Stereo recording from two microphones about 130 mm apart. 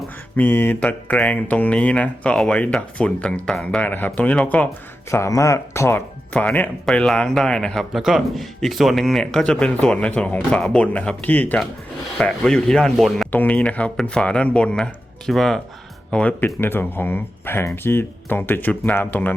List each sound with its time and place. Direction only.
0.3 s speech: 15° left (ahead or behind)
5.1 s a man's voice: 25° left (ahead or behind); by 13.2 s centre (ahead or behind)
13.3 s a man's voice: 10° left (ahead or behind)